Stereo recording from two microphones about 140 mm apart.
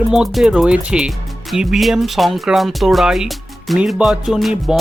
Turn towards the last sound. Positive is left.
turn(degrees=0)  # may be behind; listen again after turning